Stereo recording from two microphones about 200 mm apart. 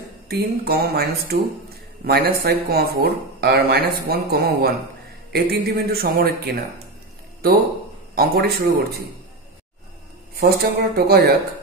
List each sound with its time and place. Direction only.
0.3 s speech: 50° right (ahead or behind)
8.1 s speech: 50° right (ahead or behind)
10.4 s speech: 55° right (ahead or behind)